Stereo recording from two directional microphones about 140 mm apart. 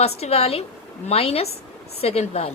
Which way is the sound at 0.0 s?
45° left (ahead or behind).